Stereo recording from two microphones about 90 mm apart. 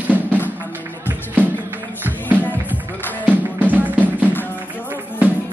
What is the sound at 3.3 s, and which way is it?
Music, 20° right (ahead or behind).